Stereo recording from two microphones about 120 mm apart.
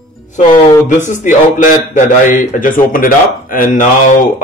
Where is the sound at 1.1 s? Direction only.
90° left.